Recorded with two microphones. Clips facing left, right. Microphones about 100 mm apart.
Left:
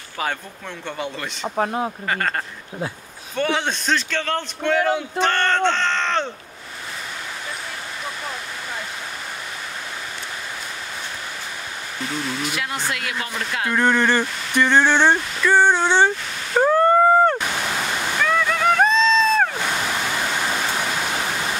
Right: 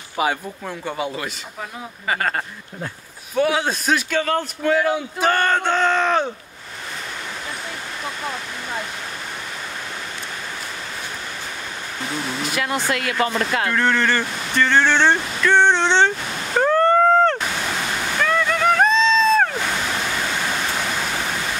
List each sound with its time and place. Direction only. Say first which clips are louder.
0.2 s a man's voice: right 5 dB; 10° right (ahead or behind)
1.6 s speech: left 11 dB; 50° left (ahead or behind)
2.0 s a man's voice: right 1 dB; 5° right (ahead or behind)
12.5 s speech: right 4 dB; 55° right (ahead or behind)
13.7 s speech: left 4 dB; 15° left (ahead or behind)
16.6 s a sound: even; 10° left (ahead or behind)
18.2 s boat: right 1 dB; centre (ahead or behind)